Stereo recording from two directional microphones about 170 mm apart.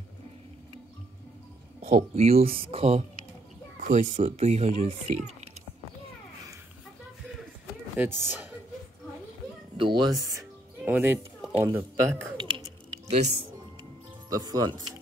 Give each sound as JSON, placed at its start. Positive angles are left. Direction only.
{"t": 1.8, "sound": "speech", "side_deg": -40}
{"t": 3.8, "sound": "speech", "side_deg": -45}
{"t": 8.0, "sound": "speech", "side_deg": -10}
{"t": 9.8, "sound": "speech", "side_deg": -25}
{"t": 10.9, "sound": "speech", "side_deg": -10}
{"t": 12.4, "sound": "a sound", "side_deg": -30}
{"t": 13.1, "sound": "speech", "side_deg": -40}
{"t": 14.3, "sound": "speech", "side_deg": -20}